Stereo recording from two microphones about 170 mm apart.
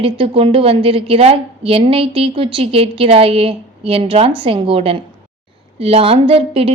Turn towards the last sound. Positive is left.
turn(degrees=-35)  # may be behind; listen again after turning